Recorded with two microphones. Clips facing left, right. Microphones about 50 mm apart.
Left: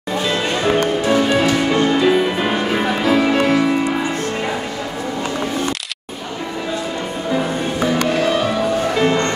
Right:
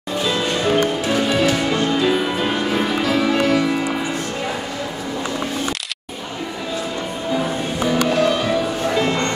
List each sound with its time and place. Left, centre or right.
0.7 s music: centre
8.1 s music: centre